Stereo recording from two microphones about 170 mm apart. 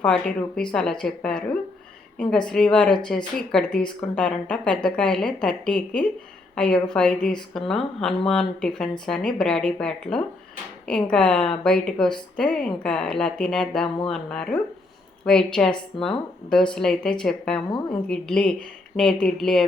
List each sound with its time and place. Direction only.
0.0 s a woman's voice: 5° left (ahead or behind)